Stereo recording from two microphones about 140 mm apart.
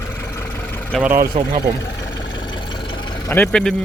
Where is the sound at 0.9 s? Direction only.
Centre (ahead or behind).